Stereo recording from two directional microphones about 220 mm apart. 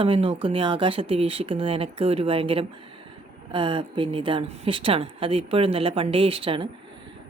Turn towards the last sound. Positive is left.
turn(degrees=-25)  # may be behind; listen again after turning